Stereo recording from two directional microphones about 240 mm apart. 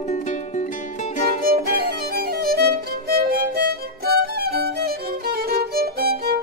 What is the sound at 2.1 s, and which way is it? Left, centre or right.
Violin, right.